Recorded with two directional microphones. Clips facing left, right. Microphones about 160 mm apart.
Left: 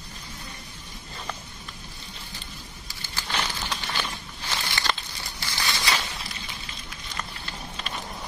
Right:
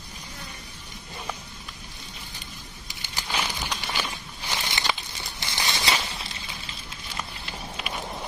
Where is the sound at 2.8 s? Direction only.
15° right (ahead or behind).